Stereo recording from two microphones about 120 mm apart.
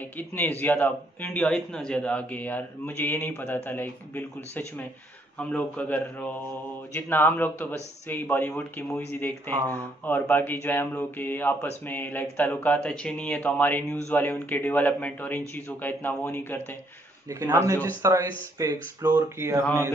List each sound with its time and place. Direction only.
0.2 s speech: 15° left (ahead or behind)
17.3 s speech: 25° right (ahead or behind)